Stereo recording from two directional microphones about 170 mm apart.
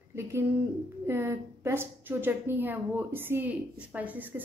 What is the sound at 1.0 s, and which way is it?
A woman's voice, 15° right (ahead or behind).